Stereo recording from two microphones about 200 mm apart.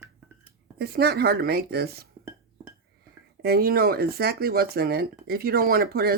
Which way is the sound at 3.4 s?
50° right (ahead or behind).